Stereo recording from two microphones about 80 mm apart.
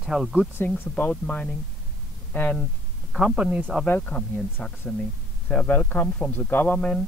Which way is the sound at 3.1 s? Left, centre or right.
Centre.